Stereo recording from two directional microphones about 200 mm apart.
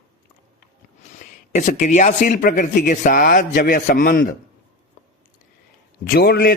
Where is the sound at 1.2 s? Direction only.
40° left (ahead or behind).